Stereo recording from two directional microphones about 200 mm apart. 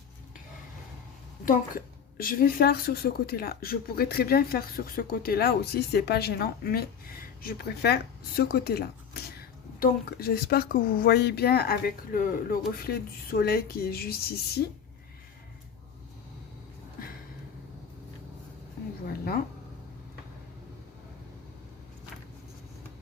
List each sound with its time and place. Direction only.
1.5 s a woman's voice: 45° left (ahead or behind)